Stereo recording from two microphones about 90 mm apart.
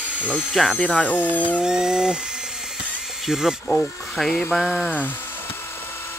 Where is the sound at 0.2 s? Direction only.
20° left (ahead or behind).